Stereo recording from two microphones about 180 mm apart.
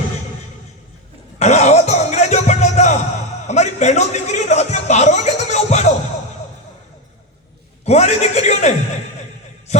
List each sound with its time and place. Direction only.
1.4 s music: 40° left (ahead or behind)
3.4 s a man's voice: 40° left (ahead or behind)
7.9 s a man's voice: 40° left (ahead or behind)